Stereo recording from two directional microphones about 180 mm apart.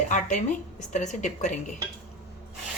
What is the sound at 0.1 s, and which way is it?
A woman's voice, 45° left (ahead or behind).